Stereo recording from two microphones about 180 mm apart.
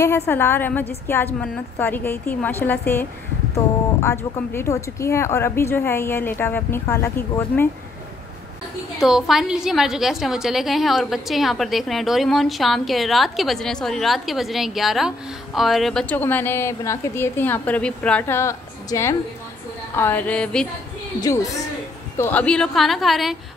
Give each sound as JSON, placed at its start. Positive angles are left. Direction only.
{"t": 0.3, "sound": "speech", "side_deg": 10}
{"t": 9.0, "sound": "a woman's voice", "side_deg": -5}
{"t": 21.2, "sound": "a woman's voice", "side_deg": 20}